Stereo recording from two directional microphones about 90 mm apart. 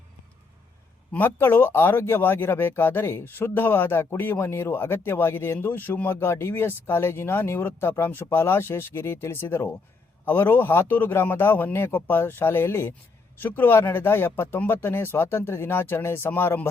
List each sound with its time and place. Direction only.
1.1 s speech: 25° left (ahead or behind)